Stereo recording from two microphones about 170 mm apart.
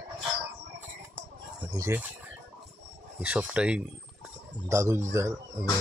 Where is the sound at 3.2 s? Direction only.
10° right (ahead or behind).